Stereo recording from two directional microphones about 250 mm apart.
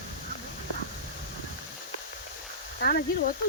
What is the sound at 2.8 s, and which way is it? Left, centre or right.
Sizzle, left.